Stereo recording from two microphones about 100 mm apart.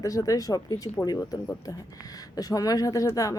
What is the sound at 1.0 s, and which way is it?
Speech, 25° left (ahead or behind).